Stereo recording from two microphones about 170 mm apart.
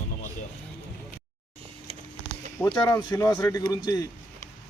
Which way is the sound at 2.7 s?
25° left (ahead or behind).